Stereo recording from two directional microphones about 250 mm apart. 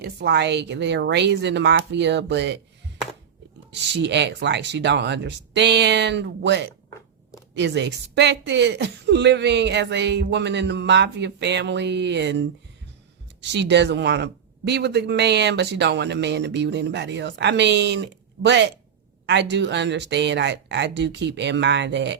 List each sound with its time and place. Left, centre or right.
0.0 s speech: right
3.9 s speech: right